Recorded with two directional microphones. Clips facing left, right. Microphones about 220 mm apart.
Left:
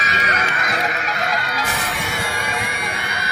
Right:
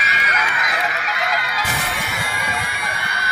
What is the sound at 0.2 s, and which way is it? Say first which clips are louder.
Music: left 1 dB; 30° left (ahead or behind).